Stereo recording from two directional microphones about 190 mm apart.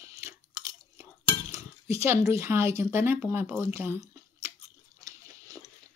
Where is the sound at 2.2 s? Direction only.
15° right (ahead or behind).